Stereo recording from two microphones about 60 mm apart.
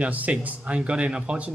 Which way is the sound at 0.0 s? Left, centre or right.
Right.